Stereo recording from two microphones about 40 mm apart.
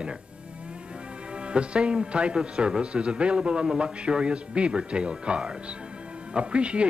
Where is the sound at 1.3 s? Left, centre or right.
Right.